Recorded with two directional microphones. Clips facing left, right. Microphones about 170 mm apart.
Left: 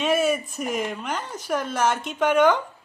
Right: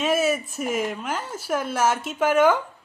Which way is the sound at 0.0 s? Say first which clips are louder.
Even; centre (ahead or behind).